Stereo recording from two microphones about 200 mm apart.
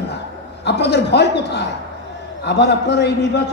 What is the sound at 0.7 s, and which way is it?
A man's voice, 55° left (ahead or behind).